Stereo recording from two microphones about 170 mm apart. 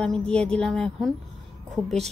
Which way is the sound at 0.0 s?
5° left (ahead or behind).